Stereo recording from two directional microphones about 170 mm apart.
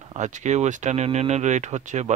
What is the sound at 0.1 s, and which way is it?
Speech, 45° right (ahead or behind).